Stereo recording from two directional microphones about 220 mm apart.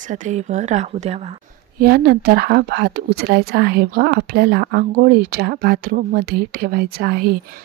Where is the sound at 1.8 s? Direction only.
45° right (ahead or behind).